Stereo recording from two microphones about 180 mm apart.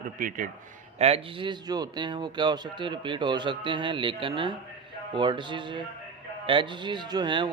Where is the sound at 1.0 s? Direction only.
35° right (ahead or behind).